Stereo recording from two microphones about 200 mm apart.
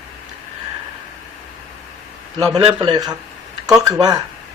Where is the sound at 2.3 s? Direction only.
20° right (ahead or behind).